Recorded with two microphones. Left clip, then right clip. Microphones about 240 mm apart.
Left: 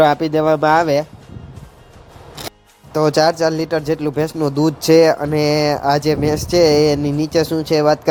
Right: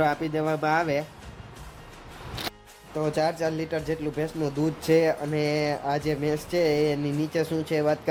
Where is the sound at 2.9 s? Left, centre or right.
Left.